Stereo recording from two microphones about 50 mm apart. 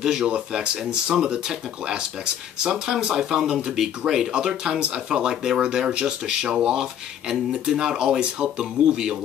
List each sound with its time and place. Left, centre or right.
0.0 s speech: centre